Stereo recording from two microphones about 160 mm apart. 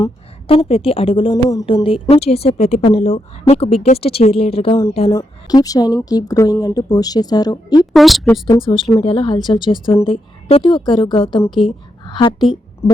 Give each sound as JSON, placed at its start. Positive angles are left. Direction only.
{"t": 0.0, "sound": "a woman's voice", "side_deg": 35}
{"t": 4.7, "sound": "a woman's voice", "side_deg": 25}
{"t": 7.9, "sound": "speech", "side_deg": 0}
{"t": 8.3, "sound": "speech", "side_deg": 15}
{"t": 8.6, "sound": "a woman's voice", "side_deg": 30}